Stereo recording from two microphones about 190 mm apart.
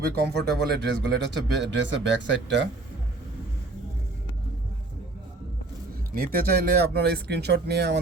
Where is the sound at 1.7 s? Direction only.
70° right (ahead or behind).